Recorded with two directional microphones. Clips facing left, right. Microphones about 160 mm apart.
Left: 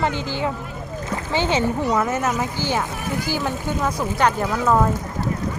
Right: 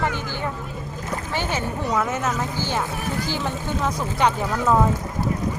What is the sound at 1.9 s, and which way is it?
A woman's voice, 5° left (ahead or behind).